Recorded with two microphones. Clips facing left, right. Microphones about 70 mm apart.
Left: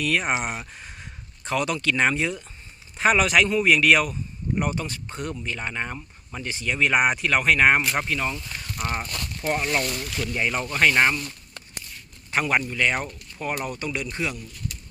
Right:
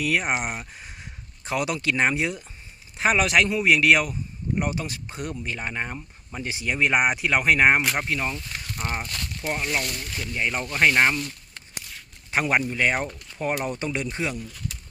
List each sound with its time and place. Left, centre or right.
0.0 s a man's voice: centre
0.6 s a sound: centre
1.5 s a man's voice: centre
9.5 s speech: centre
10.0 s speech: right
10.4 s a man's voice: centre
12.3 s speech: centre